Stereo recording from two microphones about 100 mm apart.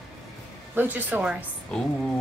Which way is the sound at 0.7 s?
20° right (ahead or behind).